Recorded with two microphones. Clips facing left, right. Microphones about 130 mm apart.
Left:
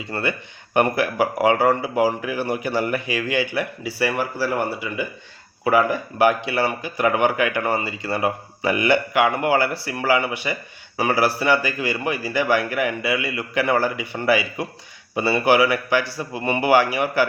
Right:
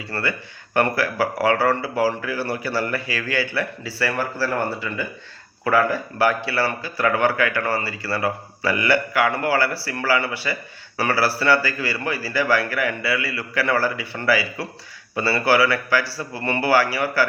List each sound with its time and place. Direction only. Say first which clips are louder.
0.0 s speech: left 1 dB; 20° left (ahead or behind)